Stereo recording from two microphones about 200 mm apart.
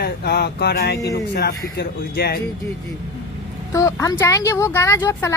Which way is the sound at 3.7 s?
15° left (ahead or behind).